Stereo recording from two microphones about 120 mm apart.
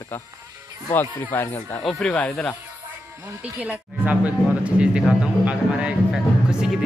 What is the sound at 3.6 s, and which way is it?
Speech, 10° right (ahead or behind).